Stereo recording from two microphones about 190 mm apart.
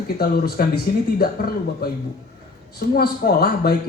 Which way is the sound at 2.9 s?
55° left (ahead or behind).